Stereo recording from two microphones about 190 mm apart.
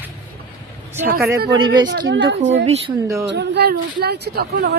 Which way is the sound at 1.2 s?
60° right (ahead or behind).